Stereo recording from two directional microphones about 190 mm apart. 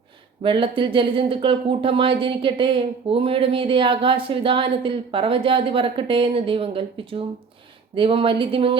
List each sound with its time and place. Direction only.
0.4 s speech: 25° right (ahead or behind)